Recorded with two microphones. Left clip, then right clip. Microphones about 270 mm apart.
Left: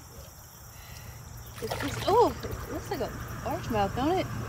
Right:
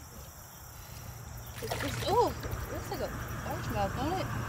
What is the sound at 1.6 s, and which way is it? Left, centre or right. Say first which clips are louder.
Speech: left 2 dB; centre.